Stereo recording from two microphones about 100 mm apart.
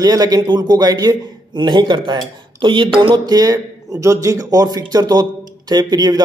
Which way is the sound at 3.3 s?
40° right (ahead or behind).